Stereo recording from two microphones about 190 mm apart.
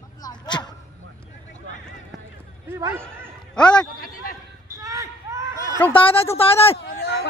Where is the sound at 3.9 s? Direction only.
50° left (ahead or behind).